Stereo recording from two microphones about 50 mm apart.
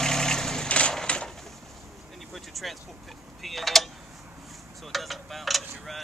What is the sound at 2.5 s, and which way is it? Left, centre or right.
Vehicle, centre.